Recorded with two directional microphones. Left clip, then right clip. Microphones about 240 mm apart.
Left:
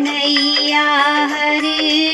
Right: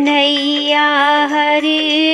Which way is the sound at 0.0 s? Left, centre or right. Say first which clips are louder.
Right 3 dB; right.